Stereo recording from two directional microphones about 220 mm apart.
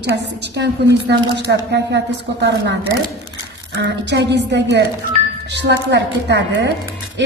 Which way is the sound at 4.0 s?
50° right (ahead or behind).